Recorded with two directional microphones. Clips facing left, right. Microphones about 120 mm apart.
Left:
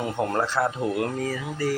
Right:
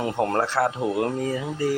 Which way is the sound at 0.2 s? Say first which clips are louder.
Right 2 dB; 35° right (ahead or behind).